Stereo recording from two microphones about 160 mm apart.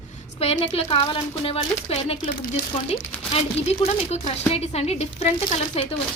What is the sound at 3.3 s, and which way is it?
Speech, 40° left (ahead or behind).